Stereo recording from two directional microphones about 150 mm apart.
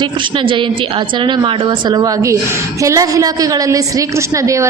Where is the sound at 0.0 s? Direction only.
35° right (ahead or behind).